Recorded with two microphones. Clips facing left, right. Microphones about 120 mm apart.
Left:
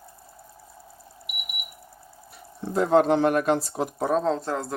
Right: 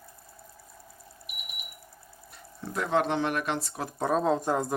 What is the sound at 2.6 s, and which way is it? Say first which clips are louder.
Speech: left 7 dB; 25° left (ahead or behind).